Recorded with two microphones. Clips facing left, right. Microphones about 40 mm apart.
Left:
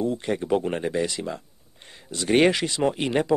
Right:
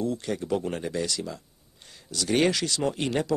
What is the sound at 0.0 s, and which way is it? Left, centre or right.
Speech, left.